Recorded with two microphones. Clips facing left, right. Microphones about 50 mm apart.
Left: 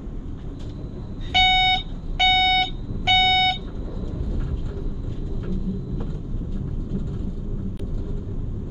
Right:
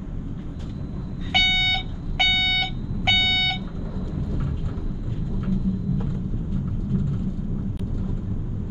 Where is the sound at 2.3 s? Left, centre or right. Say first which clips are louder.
Left 8 dB; centre.